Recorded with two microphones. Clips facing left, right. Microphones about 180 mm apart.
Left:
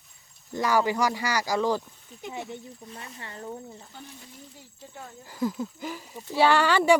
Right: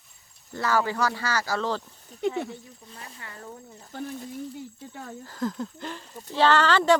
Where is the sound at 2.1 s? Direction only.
40° right (ahead or behind).